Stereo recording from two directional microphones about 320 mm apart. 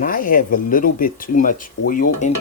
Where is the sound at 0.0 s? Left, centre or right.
Left.